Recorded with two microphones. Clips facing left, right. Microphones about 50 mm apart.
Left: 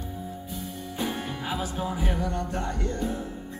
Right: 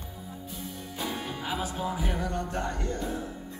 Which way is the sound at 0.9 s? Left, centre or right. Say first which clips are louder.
Left 3 dB; left.